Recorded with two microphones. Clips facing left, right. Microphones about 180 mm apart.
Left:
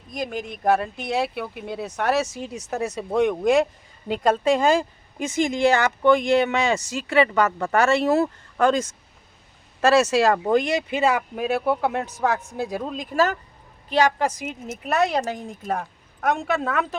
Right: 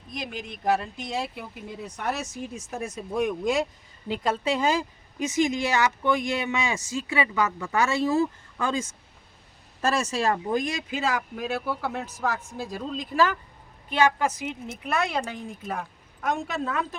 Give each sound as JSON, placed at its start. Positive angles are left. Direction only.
{"t": 0.1, "sound": "speech", "side_deg": 45}
{"t": 4.1, "sound": "a woman's voice", "side_deg": 50}